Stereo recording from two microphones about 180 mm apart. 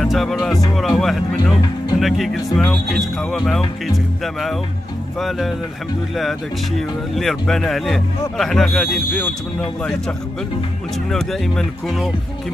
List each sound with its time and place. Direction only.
0.0 s speech: centre (ahead or behind)
7.2 s speech: centre (ahead or behind)
11.1 s speech: centre (ahead or behind)